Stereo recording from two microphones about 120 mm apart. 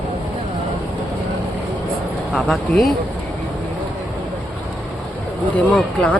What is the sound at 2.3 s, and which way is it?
Speech, centre (ahead or behind).